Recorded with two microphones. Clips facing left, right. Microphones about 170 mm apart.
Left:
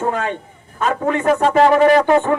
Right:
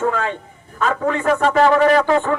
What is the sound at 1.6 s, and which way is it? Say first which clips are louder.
Speech: left 2 dB; 30° left (ahead or behind).